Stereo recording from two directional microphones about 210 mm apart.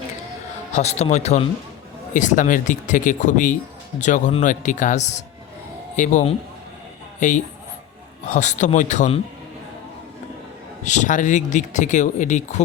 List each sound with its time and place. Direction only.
0.7 s speech: 30° left (ahead or behind)
10.8 s speech: 35° left (ahead or behind)